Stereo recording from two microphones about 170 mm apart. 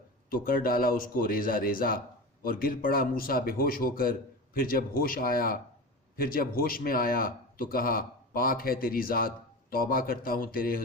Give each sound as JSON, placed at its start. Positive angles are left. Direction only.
{"t": 0.3, "sound": "speech", "side_deg": 55}